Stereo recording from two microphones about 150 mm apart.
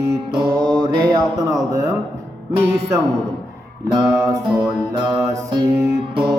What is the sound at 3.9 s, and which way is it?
Speech, 25° right (ahead or behind).